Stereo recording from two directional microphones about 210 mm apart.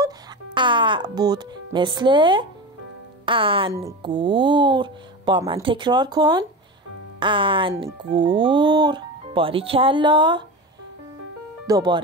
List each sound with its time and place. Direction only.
0.6 s speech: 20° right (ahead or behind)
11.6 s speech: 20° right (ahead or behind)